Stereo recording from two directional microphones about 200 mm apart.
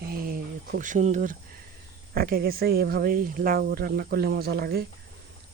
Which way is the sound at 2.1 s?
50° right (ahead or behind).